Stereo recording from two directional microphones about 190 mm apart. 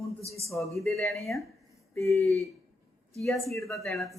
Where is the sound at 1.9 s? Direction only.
15° left (ahead or behind).